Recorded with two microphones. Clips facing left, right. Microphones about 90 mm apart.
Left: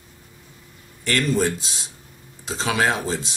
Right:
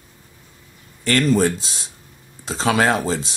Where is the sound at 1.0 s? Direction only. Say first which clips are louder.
Right 4 dB; 40° right (ahead or behind).